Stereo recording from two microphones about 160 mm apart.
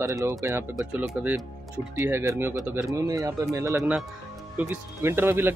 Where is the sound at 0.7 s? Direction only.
5° right (ahead or behind).